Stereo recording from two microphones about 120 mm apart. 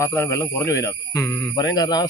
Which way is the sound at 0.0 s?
20° left (ahead or behind).